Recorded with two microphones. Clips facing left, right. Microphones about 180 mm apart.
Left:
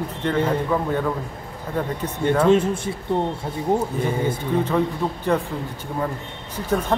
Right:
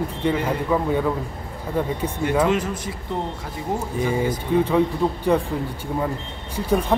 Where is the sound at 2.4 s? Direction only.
25° left (ahead or behind).